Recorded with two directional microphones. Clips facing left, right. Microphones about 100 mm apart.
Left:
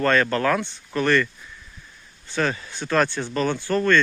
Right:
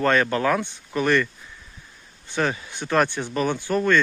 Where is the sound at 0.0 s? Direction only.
20° right (ahead or behind).